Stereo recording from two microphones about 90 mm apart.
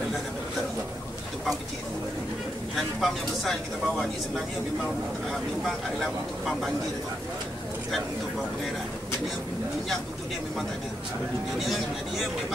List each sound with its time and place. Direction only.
2.7 s speech: centre (ahead or behind)
5.9 s speech: centre (ahead or behind)